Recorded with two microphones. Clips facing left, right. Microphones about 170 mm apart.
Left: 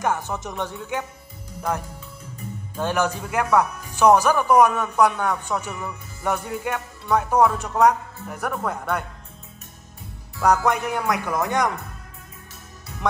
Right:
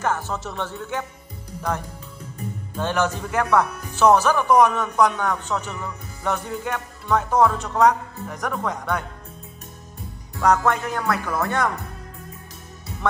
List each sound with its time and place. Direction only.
0.0 s speech: 15° left (ahead or behind)
2.8 s speech: 10° left (ahead or behind)
10.4 s speech: 15° left (ahead or behind)